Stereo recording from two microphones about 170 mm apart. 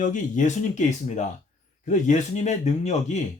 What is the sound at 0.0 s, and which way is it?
Speech, 45° left (ahead or behind).